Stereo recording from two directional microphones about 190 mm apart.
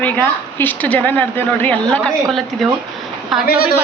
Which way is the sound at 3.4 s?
55° left (ahead or behind).